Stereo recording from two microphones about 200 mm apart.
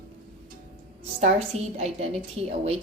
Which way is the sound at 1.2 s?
35° right (ahead or behind).